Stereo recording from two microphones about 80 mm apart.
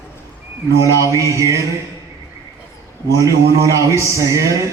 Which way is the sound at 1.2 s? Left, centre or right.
Right.